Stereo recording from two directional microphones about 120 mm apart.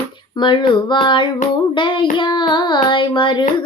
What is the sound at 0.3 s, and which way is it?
Child singing, 40° left (ahead or behind).